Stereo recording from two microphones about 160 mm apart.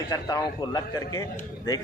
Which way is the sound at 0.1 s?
25° left (ahead or behind).